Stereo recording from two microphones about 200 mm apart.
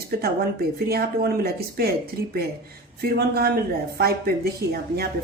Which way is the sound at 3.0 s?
50° right (ahead or behind).